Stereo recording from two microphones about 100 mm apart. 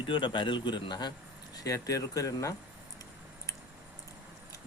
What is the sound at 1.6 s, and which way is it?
Speech, 35° left (ahead or behind).